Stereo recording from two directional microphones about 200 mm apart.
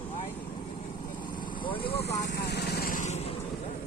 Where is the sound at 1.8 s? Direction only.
25° left (ahead or behind).